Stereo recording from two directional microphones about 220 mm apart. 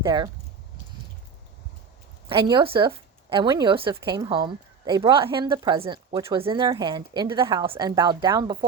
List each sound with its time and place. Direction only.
0.0 s speech: 20° right (ahead or behind)
2.3 s a woman's voice: 20° right (ahead or behind)